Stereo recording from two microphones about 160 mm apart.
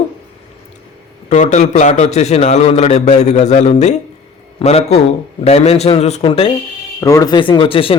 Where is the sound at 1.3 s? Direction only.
50° left (ahead or behind).